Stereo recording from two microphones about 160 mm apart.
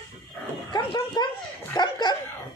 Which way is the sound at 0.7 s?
30° left (ahead or behind).